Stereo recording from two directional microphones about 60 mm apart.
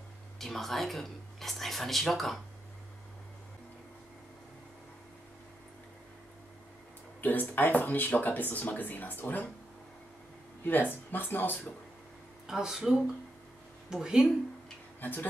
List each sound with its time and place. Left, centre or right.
0.4 s speech: centre
7.2 s speech: left
10.6 s speech: left
12.4 s speech: centre
15.0 s speech: left